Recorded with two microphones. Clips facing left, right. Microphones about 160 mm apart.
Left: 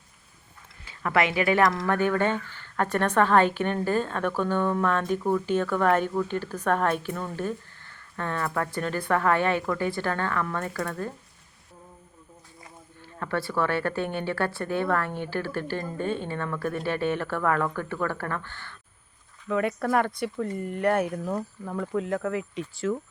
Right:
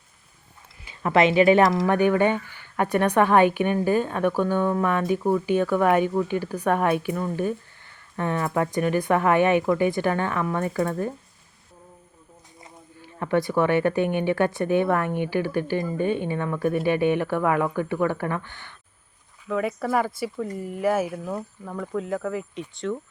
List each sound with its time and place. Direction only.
0.9 s speech: 25° right (ahead or behind)
12.6 s speech: 20° right (ahead or behind)
19.5 s speech: centre (ahead or behind)